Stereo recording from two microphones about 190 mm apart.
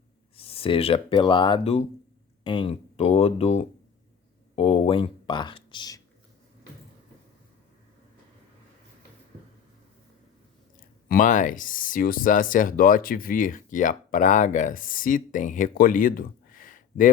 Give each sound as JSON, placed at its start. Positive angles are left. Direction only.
{"t": 0.3, "sound": "speech", "side_deg": 30}
{"t": 10.8, "sound": "speech", "side_deg": 45}